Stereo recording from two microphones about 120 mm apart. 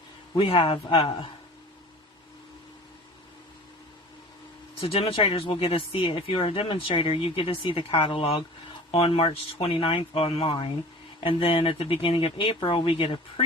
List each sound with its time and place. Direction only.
0.3 s speech: 50° left (ahead or behind)
4.8 s speech: 55° left (ahead or behind)